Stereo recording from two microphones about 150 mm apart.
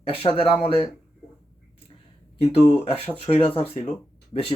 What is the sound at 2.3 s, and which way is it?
Speech, 40° left (ahead or behind).